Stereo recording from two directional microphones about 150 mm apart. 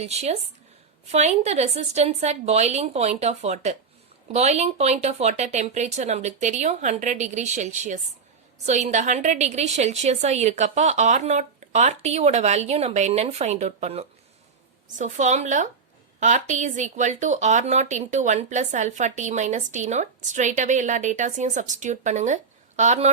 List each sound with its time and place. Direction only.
0.0 s a woman's voice: 45° right (ahead or behind)